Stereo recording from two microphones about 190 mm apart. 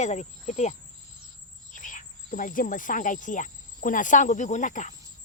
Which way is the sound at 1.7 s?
45° left (ahead or behind).